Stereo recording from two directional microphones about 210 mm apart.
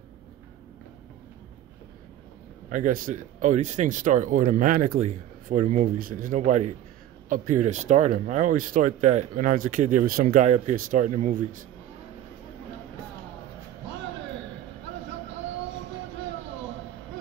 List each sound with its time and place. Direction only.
2.7 s speech: 40° right (ahead or behind)